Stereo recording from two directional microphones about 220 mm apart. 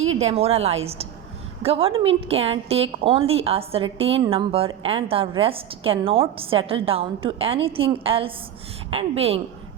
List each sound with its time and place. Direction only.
0.2 s a woman's voice: 30° right (ahead or behind)